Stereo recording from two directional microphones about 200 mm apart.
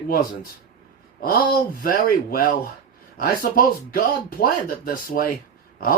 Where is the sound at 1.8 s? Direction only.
45° left (ahead or behind).